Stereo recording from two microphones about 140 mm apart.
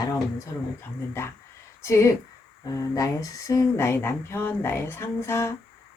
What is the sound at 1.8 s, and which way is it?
Speech, 20° left (ahead or behind).